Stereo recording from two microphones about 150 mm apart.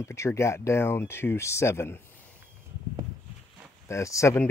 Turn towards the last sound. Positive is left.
turn(degrees=20)  # may be behind; listen again after turning